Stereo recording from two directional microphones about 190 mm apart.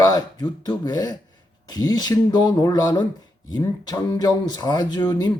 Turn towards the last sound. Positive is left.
turn(degrees=20)  # may be behind; listen again after turning